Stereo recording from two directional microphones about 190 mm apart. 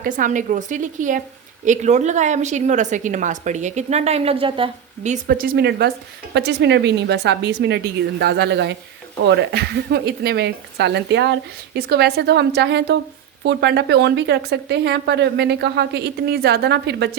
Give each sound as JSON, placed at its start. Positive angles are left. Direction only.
{"t": 0.0, "sound": "speech", "side_deg": -45}
{"t": 5.1, "sound": "speech", "side_deg": -50}